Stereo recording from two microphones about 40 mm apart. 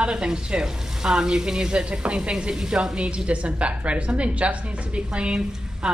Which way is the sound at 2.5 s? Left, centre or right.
Centre.